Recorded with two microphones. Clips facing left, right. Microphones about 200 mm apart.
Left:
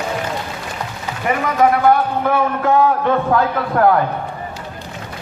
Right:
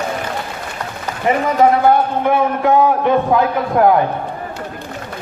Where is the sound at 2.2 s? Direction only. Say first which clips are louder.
Right 2 dB; 20° right (ahead or behind).